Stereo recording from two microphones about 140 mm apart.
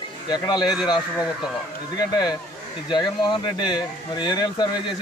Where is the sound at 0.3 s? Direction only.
30° left (ahead or behind).